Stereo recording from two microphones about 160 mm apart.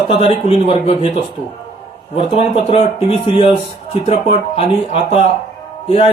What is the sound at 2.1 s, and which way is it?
Speech, 40° left (ahead or behind).